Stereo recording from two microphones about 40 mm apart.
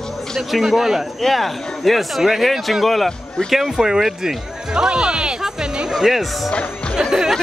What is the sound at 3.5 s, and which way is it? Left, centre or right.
Speech, centre.